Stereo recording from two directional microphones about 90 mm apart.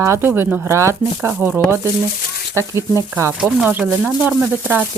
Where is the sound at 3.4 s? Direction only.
20° right (ahead or behind).